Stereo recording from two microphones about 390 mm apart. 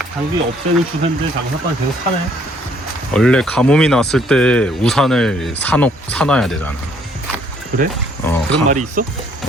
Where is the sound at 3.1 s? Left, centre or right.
Centre.